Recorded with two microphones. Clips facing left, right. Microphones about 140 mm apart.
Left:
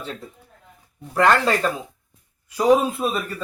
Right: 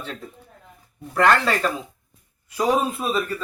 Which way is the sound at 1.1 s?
15° left (ahead or behind).